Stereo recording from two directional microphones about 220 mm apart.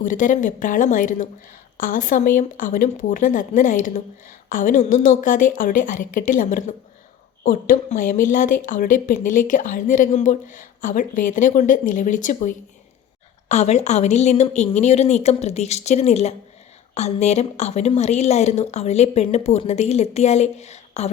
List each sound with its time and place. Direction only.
0.0 s a woman's voice: 35° left (ahead or behind)